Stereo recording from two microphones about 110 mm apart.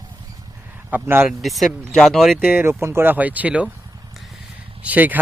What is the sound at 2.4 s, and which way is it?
Speech, 20° right (ahead or behind).